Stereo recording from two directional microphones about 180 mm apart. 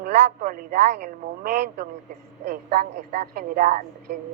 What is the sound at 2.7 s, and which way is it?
A man's voice, 60° right (ahead or behind).